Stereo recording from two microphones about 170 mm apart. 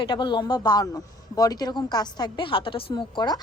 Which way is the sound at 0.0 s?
30° left (ahead or behind).